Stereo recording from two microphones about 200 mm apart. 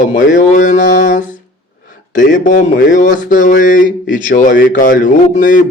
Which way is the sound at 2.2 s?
40° left (ahead or behind).